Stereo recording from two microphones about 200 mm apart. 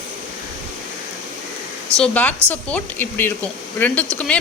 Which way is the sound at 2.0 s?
5° left (ahead or behind).